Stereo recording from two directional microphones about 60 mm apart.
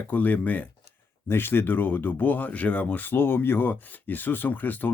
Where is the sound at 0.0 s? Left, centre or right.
Left.